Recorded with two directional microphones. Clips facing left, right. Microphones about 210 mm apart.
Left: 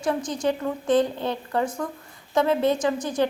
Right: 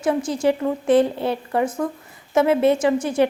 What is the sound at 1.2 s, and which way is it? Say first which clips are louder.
Speech: right 4 dB; 20° right (ahead or behind).